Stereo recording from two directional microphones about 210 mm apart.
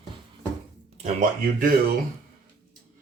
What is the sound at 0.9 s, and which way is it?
Speech, 35° right (ahead or behind).